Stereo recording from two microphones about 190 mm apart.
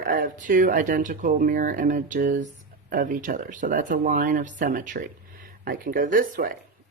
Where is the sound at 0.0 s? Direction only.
50° right (ahead or behind).